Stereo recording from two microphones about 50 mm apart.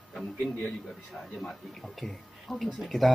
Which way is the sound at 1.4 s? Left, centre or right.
Centre.